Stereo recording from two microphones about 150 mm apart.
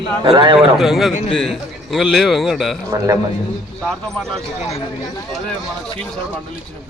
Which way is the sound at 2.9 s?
25° right (ahead or behind).